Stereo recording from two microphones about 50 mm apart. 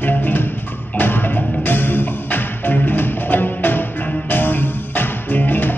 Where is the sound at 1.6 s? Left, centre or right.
Left.